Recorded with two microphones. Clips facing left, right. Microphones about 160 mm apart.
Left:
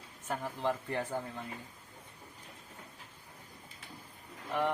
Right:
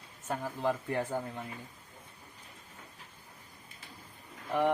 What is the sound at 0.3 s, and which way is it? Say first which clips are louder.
Speech: right 2 dB; centre (ahead or behind).